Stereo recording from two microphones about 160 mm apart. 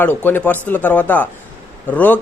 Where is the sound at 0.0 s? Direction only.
10° left (ahead or behind).